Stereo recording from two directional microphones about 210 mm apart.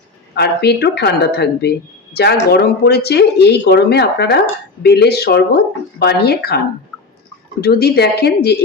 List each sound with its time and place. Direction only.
0.3 s speech: 50° left (ahead or behind)
7.6 s speech: 50° left (ahead or behind)